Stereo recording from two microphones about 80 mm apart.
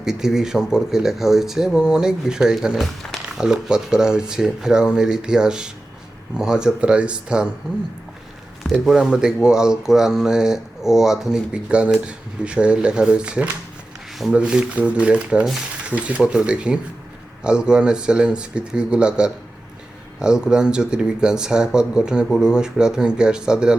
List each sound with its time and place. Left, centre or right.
0.0 s speech: centre
3.3 s speech: centre
8.9 s a man's voice: centre